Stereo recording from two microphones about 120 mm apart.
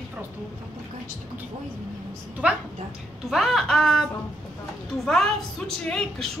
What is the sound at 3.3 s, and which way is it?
A woman's voice, centre (ahead or behind).